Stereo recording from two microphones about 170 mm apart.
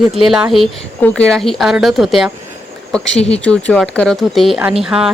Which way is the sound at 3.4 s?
5° left (ahead or behind).